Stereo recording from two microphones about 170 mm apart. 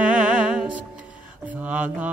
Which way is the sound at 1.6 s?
10° right (ahead or behind).